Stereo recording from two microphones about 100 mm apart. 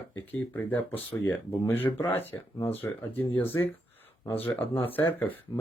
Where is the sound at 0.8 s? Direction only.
20° left (ahead or behind).